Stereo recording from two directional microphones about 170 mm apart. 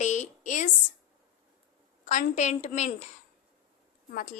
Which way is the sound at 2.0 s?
45° left (ahead or behind).